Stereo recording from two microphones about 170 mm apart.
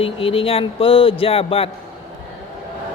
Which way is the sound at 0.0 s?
35° left (ahead or behind).